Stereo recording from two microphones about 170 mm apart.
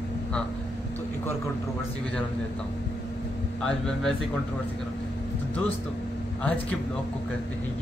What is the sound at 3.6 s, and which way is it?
Speech, 5° left (ahead or behind).